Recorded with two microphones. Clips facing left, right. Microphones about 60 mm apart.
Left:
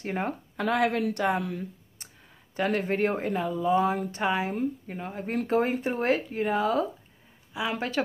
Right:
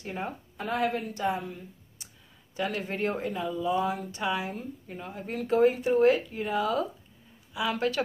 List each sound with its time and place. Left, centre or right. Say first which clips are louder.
0.0 s speech: left 4 dB; left
0.6 s a woman's voice: left 4 dB; left
2.5 s speech: left 5 dB; left